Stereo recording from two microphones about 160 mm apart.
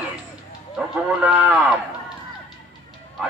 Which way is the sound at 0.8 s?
10° right (ahead or behind).